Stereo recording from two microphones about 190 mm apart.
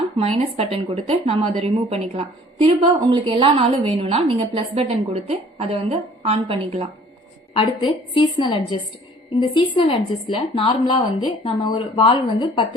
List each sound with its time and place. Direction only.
0.2 s a woman's voice: 35° right (ahead or behind)
7.5 s speech: 25° left (ahead or behind)